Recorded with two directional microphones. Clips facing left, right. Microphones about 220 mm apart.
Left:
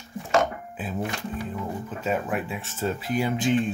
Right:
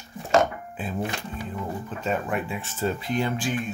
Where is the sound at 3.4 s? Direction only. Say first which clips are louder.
Left 5 dB; 25° left (ahead or behind).